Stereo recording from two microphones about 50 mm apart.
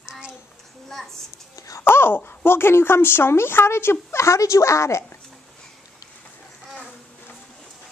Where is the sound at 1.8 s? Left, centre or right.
Left.